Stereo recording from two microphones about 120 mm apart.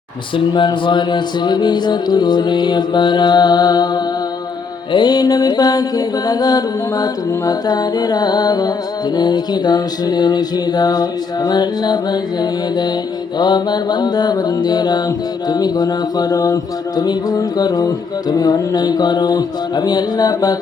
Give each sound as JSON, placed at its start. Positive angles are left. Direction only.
{"t": 0.3, "sound": "music", "side_deg": 40}